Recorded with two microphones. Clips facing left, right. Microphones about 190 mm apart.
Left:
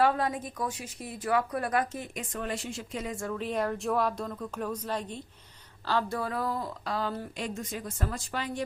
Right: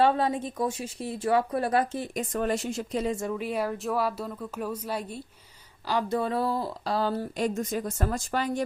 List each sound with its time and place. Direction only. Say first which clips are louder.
0.0 s a woman's voice: right 3 dB; 25° right (ahead or behind)
3.3 s speech: right 1 dB; 10° right (ahead or behind); by 8.6 s 45° right (ahead or behind)